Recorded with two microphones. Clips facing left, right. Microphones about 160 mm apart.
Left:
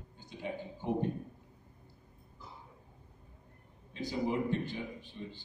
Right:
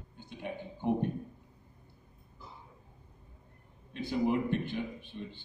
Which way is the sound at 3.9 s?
60° right (ahead or behind).